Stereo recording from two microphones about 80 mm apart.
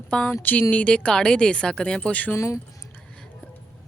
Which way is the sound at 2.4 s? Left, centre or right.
Left.